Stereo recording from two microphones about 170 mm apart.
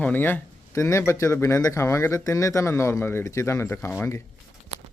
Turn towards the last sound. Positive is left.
turn(degrees=15)  # may be behind; listen again after turning